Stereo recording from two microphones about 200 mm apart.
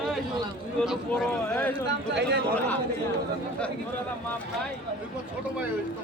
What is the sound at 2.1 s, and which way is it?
Speech, 60° right (ahead or behind).